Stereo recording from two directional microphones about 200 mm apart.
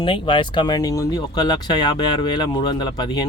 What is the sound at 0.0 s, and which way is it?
Speech, 25° left (ahead or behind).